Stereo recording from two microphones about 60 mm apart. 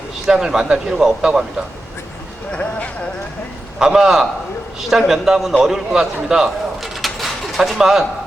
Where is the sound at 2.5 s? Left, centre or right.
Left.